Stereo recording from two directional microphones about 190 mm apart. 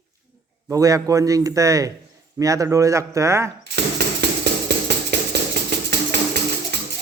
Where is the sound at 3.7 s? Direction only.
60° right (ahead or behind).